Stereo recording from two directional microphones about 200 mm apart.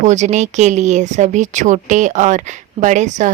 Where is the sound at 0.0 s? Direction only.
35° right (ahead or behind).